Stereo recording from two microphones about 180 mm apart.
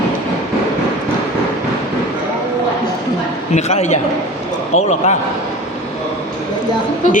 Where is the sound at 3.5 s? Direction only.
40° left (ahead or behind).